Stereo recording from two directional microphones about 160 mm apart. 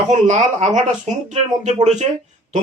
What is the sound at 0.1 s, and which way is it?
Speech, 50° right (ahead or behind).